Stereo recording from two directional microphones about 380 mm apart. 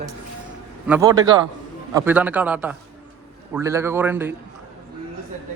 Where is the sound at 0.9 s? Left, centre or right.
Centre.